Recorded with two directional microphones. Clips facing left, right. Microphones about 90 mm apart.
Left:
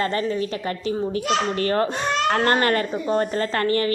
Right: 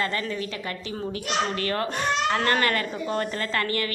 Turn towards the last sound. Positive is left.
turn(degrees=30)  # may be behind; listen again after turning